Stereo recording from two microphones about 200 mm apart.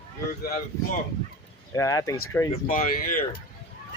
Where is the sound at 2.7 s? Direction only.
45° left (ahead or behind).